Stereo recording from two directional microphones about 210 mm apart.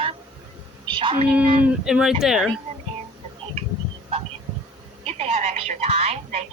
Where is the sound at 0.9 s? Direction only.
25° right (ahead or behind).